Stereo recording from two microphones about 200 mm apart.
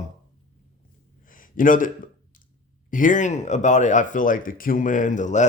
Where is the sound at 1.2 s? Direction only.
45° left (ahead or behind).